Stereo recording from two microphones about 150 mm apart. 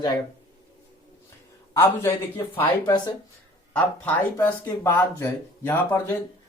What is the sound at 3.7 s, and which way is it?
Speech, 10° left (ahead or behind).